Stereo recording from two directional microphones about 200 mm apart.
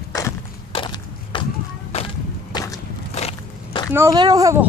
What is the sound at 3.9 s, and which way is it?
Speech, 15° right (ahead or behind).